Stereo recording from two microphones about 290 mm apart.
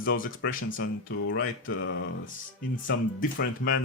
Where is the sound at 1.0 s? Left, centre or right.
Left.